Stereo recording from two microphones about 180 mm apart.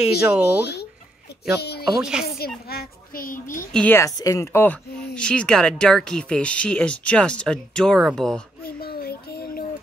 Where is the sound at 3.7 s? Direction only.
10° left (ahead or behind).